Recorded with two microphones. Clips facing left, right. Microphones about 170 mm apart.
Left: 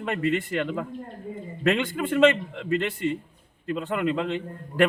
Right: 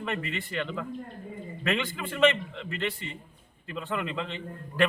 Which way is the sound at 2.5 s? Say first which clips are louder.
Left 7 dB; 55° left (ahead or behind).